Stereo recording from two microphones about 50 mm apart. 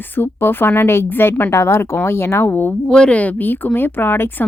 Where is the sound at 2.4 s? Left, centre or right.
Left.